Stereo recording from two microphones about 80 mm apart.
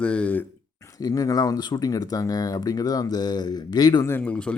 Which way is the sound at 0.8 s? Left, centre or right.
Left.